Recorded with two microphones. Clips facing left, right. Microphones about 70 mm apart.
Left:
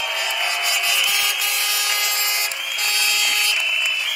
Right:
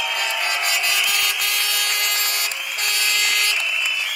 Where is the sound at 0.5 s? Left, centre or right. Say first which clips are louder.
Even; right.